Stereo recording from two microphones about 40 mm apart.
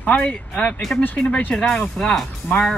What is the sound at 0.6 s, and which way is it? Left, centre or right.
Speech, left.